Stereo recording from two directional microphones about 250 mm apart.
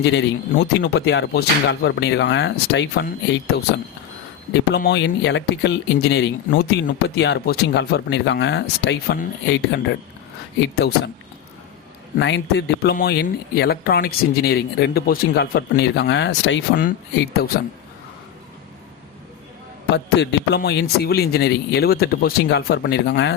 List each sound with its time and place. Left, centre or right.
0.0 s speech: left
4.5 s speech: left
12.1 s speech: left
19.9 s speech: left